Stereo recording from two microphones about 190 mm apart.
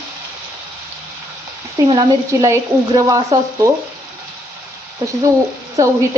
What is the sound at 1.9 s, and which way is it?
Speech, 20° right (ahead or behind).